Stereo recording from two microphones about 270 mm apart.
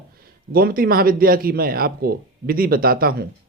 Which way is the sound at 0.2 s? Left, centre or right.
Right.